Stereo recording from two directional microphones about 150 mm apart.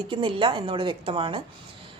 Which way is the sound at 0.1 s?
30° right (ahead or behind).